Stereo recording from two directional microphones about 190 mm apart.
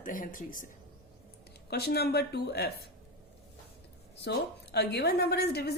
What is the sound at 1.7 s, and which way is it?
A woman's voice, 55° left (ahead or behind).